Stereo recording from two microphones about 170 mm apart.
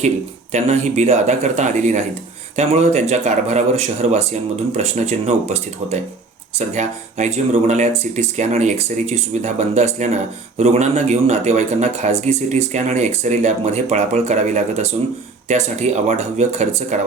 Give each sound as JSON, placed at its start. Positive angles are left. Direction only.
{"t": 0.5, "sound": "speech", "side_deg": -40}